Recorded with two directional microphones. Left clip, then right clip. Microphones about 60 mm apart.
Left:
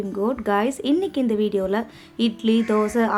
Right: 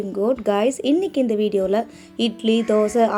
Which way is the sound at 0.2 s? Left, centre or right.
Right.